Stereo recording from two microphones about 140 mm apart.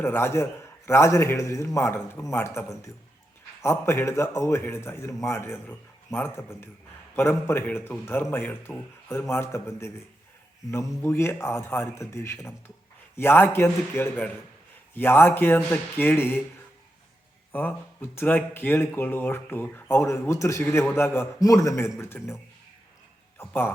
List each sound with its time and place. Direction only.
0.0 s a man's voice: 15° left (ahead or behind)
17.5 s a man's voice: 15° left (ahead or behind)
23.4 s speech: 15° left (ahead or behind)